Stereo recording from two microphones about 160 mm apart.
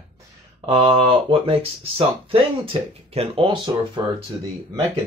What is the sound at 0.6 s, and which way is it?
Speech, 30° right (ahead or behind).